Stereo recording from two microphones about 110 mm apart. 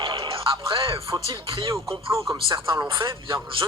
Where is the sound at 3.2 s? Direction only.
50° right (ahead or behind).